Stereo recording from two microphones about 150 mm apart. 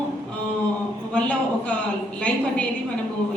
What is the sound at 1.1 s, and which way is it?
Speech, 10° left (ahead or behind).